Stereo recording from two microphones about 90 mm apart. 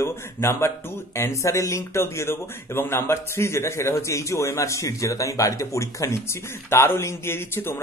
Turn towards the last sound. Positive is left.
turn(degrees=30)  # may be behind; listen again after turning